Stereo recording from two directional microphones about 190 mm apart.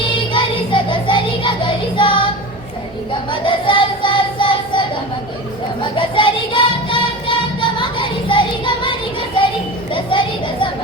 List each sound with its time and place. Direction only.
0.0 s music: 25° left (ahead or behind)
3.1 s child singing: 25° left (ahead or behind)
9.9 s a sound: 25° left (ahead or behind)